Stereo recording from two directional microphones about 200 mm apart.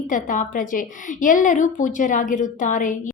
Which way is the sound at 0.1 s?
40° left (ahead or behind).